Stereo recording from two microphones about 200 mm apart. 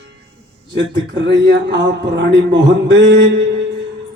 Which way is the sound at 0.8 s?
60° right (ahead or behind).